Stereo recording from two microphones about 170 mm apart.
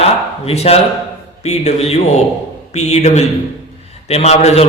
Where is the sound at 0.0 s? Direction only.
35° left (ahead or behind).